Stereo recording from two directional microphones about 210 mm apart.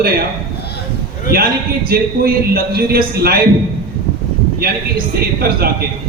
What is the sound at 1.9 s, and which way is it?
A man's voice, 45° right (ahead or behind).